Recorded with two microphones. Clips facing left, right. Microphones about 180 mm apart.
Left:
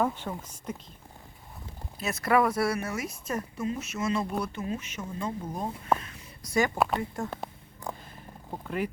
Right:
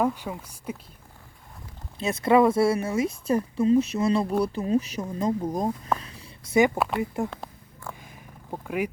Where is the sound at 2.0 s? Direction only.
25° right (ahead or behind).